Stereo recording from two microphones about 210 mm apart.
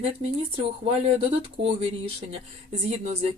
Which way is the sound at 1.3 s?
30° right (ahead or behind).